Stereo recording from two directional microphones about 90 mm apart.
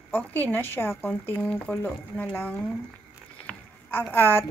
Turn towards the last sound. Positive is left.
turn(degrees=20)  # may be behind; listen again after turning